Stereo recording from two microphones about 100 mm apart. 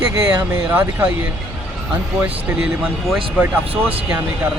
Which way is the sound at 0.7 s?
20° right (ahead or behind).